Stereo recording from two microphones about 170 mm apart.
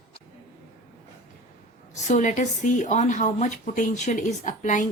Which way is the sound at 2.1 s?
45° left (ahead or behind).